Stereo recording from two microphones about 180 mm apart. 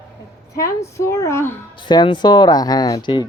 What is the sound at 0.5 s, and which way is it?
Speech, 15° left (ahead or behind).